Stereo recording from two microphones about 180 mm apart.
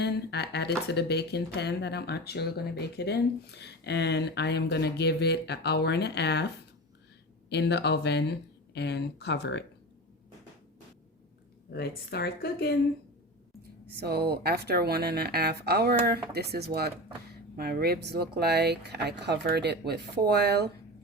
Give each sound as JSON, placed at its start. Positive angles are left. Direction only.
{"t": 0.0, "sound": "speech", "side_deg": 65}
{"t": 7.5, "sound": "speech", "side_deg": 70}
{"t": 11.7, "sound": "speech", "side_deg": 60}
{"t": 13.6, "sound": "speech", "side_deg": -65}